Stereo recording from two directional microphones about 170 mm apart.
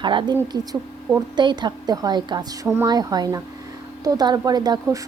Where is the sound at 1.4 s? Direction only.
25° right (ahead or behind).